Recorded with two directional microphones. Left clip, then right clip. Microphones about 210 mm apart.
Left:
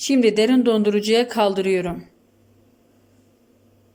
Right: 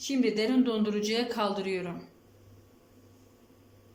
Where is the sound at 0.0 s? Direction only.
45° left (ahead or behind).